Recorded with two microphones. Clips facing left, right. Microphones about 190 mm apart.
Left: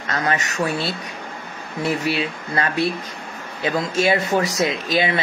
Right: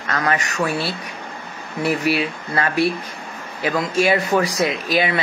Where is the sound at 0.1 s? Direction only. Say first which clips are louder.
Right 1 dB; 30° left (ahead or behind).